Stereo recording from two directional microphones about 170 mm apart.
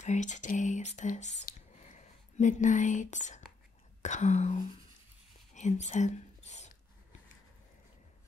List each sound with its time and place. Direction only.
0.0 s speech: 45° left (ahead or behind)
4.0 s whispering: 45° left (ahead or behind)